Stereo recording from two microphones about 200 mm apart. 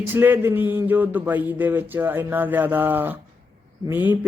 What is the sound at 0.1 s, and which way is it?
Speech, 10° right (ahead or behind).